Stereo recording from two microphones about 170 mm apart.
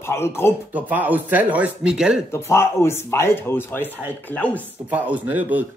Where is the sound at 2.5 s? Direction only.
15° left (ahead or behind).